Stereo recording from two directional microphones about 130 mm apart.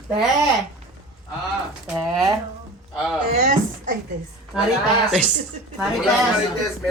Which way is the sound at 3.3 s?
75° right (ahead or behind).